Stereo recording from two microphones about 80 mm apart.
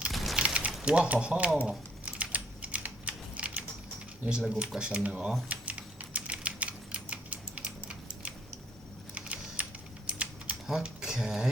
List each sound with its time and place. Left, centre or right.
0.3 s mechanisms: centre
0.9 s speech: centre
1.5 s typing: centre
4.3 s speech: centre
5.5 s typing: centre
10.7 s speech: centre